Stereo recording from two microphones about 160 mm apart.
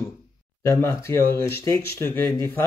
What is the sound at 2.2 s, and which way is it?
Speech, 25° right (ahead or behind).